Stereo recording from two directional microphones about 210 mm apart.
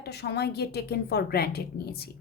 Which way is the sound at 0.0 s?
50° left (ahead or behind).